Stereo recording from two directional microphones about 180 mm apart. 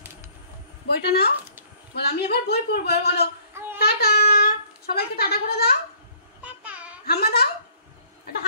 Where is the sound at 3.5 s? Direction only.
10° right (ahead or behind).